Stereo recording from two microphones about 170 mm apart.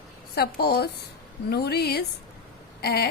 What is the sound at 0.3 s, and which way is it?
A woman's voice, 65° left (ahead or behind).